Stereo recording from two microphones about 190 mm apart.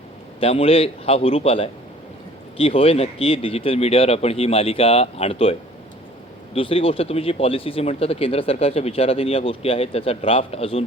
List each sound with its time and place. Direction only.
0.3 s speech: 30° left (ahead or behind)